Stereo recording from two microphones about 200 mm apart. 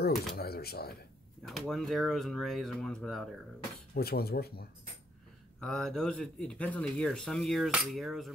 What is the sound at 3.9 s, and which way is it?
Speech, 50° left (ahead or behind).